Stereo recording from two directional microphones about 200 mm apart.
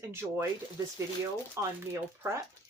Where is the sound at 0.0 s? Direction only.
10° right (ahead or behind).